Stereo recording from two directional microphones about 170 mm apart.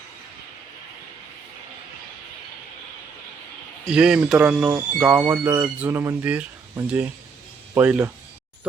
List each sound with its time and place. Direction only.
3.8 s speech: 5° right (ahead or behind)